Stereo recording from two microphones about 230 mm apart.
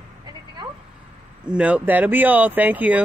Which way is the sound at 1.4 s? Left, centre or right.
Centre.